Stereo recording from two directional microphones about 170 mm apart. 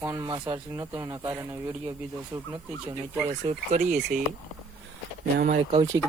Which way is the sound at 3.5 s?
50° right (ahead or behind).